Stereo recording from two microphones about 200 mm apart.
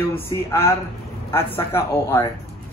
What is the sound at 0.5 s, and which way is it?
A man's voice, 15° left (ahead or behind).